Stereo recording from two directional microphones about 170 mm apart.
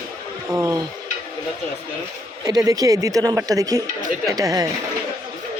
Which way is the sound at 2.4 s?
20° right (ahead or behind).